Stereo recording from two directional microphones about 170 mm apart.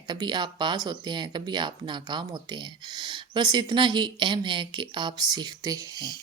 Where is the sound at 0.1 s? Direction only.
25° right (ahead or behind).